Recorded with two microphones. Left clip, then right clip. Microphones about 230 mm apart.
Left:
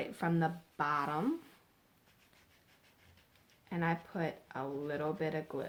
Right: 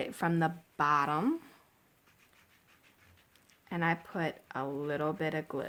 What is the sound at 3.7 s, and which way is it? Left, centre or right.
Speech, right.